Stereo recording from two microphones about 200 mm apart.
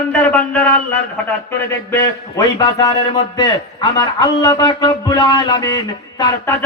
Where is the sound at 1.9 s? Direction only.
15° left (ahead or behind).